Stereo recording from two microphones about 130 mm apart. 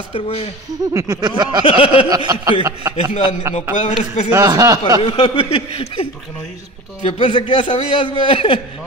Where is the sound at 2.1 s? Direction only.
30° right (ahead or behind).